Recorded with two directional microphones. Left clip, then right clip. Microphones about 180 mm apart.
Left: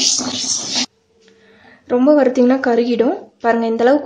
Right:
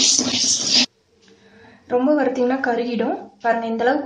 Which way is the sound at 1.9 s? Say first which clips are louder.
Left 6 dB; 50° left (ahead or behind).